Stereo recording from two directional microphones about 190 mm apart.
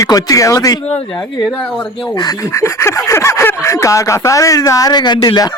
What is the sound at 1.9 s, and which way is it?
Speech, 25° left (ahead or behind).